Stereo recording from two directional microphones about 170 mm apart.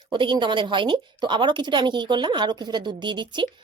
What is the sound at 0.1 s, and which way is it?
A woman's voice, 30° right (ahead or behind).